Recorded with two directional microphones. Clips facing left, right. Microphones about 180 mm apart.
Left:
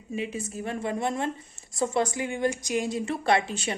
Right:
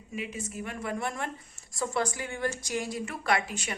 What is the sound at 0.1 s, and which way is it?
A woman's voice, 30° left (ahead or behind).